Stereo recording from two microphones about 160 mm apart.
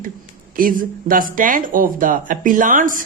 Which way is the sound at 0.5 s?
60° right (ahead or behind).